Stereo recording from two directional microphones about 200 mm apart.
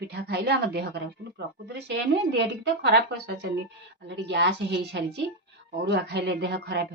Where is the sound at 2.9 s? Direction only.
60° right (ahead or behind).